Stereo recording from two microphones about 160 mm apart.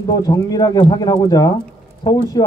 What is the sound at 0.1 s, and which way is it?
Speech, 25° left (ahead or behind).